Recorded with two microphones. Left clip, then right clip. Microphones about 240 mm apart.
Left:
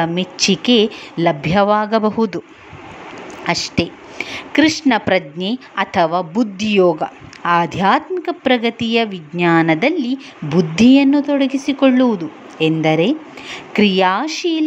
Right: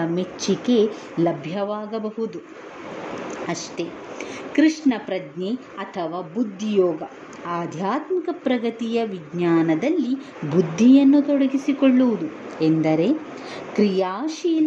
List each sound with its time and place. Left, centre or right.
0.6 s a woman's voice: centre
3.7 s a woman's voice: centre